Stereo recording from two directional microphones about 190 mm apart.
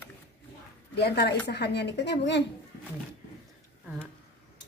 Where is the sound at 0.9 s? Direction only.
60° left (ahead or behind).